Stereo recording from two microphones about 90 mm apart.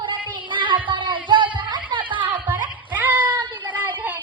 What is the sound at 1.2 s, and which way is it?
Music, 65° right (ahead or behind).